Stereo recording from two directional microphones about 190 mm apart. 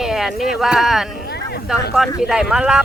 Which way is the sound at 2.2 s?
5° right (ahead or behind).